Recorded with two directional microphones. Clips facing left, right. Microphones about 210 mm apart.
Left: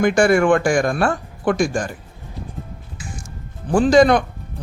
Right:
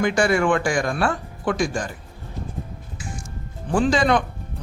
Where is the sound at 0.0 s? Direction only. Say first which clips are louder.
Left 5 dB; 50° left (ahead or behind).